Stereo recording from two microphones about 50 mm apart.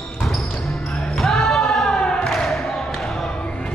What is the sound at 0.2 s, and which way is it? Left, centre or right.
Basketball bounce, centre.